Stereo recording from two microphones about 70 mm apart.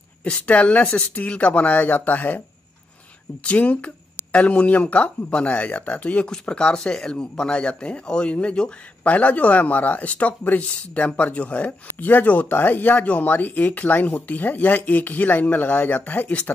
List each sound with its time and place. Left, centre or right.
0.2 s speech: centre
3.4 s speech: centre